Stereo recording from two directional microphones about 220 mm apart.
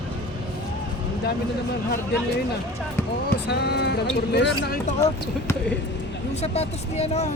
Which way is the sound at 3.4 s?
50° left (ahead or behind).